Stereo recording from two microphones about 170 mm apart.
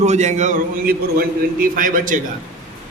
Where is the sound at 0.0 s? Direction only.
40° right (ahead or behind).